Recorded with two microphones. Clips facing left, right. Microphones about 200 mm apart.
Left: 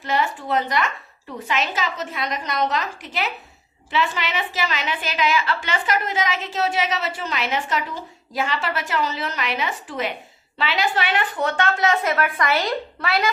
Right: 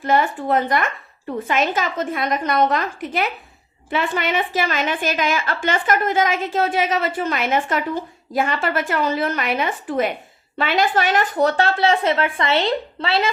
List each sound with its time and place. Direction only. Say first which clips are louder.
0.0 s a woman's voice: right 5 dB; 50° right (ahead or behind); by 13.3 s 30° right (ahead or behind)